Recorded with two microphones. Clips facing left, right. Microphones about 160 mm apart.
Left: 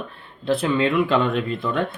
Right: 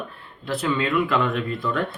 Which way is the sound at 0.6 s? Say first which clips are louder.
Left 1 dB; 25° left (ahead or behind).